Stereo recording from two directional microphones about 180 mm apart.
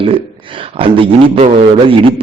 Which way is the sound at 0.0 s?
30° right (ahead or behind).